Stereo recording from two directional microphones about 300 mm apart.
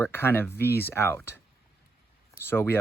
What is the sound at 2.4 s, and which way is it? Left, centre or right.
Speech, centre.